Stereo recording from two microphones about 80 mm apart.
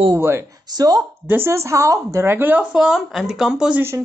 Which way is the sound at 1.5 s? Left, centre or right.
Right.